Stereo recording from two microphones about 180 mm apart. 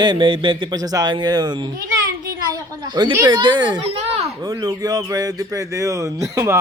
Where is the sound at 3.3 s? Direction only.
25° right (ahead or behind).